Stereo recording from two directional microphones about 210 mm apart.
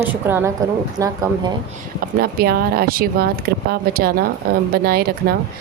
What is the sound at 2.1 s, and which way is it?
Speech, 45° right (ahead or behind).